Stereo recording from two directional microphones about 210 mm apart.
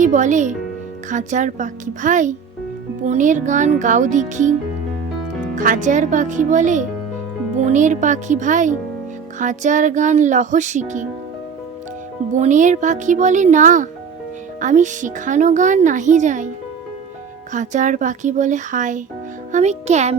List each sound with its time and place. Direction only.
0.0 s a woman's voice: 35° right (ahead or behind)
5.5 s a woman's voice: 35° right (ahead or behind)
12.4 s a woman's voice: 35° right (ahead or behind)
17.5 s a woman's voice: 35° right (ahead or behind)